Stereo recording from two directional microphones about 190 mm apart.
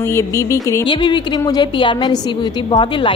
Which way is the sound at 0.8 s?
25° left (ahead or behind).